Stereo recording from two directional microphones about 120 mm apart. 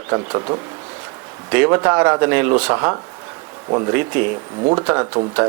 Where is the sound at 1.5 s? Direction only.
20° right (ahead or behind).